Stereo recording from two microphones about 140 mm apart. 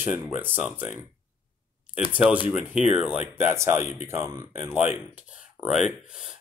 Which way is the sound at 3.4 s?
20° right (ahead or behind).